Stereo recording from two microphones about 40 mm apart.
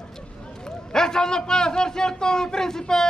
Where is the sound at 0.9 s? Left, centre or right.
Centre.